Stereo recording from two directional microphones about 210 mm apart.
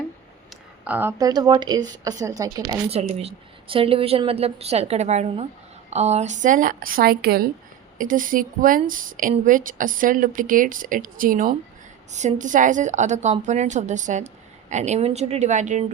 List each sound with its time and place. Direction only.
0.5 s a woman's voice: 10° right (ahead or behind)
3.0 s a woman's voice: 30° right (ahead or behind)